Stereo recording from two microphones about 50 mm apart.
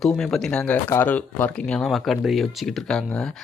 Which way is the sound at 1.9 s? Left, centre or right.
Centre.